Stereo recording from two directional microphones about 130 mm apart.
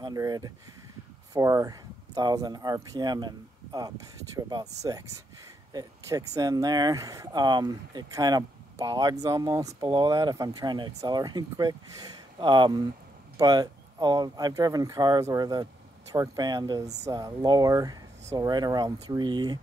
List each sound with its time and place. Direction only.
0.0 s speech: 30° right (ahead or behind)
5.7 s speech: 30° right (ahead or behind)